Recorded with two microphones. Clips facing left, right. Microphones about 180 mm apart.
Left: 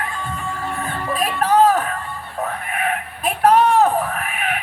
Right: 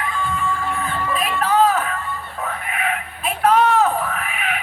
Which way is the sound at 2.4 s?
40° left (ahead or behind).